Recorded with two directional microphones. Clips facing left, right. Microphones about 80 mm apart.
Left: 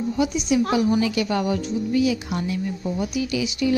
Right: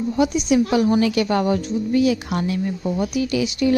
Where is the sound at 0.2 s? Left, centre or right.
Right.